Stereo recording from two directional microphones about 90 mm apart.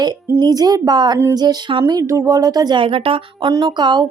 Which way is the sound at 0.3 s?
50° right (ahead or behind).